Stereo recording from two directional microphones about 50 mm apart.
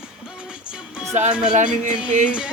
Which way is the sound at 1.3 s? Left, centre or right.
Centre.